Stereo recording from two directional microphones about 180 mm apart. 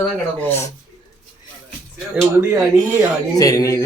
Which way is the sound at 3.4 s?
20° left (ahead or behind).